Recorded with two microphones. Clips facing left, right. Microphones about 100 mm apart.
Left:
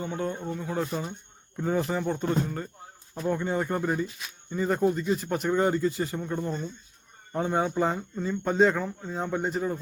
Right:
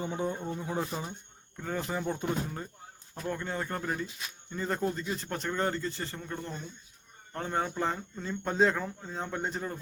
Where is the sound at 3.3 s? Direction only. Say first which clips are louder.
Left 7 dB; 15° left (ahead or behind).